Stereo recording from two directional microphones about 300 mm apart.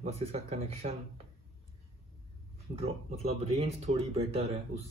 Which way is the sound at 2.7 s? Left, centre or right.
Centre.